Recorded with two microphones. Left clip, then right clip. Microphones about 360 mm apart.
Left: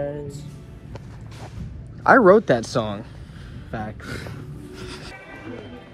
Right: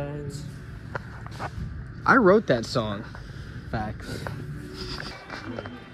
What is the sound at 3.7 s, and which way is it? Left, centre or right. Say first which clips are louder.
Speech: even; right.